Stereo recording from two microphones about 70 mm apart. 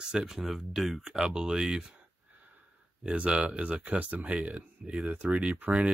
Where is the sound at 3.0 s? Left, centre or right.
Centre.